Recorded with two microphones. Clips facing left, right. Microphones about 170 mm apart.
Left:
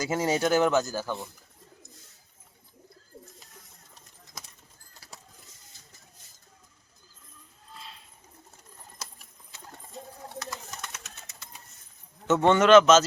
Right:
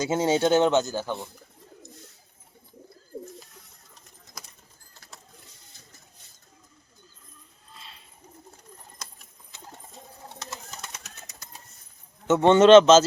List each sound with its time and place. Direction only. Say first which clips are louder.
0.0 s speech: right 3 dB; 25° right (ahead or behind)
7.7 s a sound: left 3 dB; centre (ahead or behind)
9.0 s clip-clop: left 2 dB; 5° left (ahead or behind)
10.4 s pigeon: left 1 dB; 25° right (ahead or behind)
12.3 s speech: right 4 dB; 20° right (ahead or behind)